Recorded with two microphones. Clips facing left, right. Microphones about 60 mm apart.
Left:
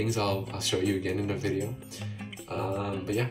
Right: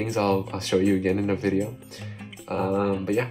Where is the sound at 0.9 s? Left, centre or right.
Right.